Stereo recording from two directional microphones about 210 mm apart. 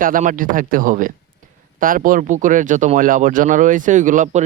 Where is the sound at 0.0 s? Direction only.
40° right (ahead or behind).